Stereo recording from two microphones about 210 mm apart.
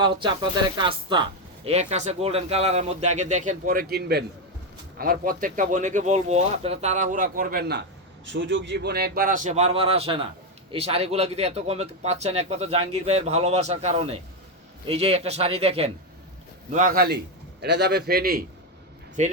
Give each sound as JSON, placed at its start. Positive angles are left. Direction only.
{"t": 0.0, "sound": "a man's voice", "side_deg": -25}
{"t": 16.7, "sound": "a man's voice", "side_deg": -40}
{"t": 19.2, "sound": "speech", "side_deg": -35}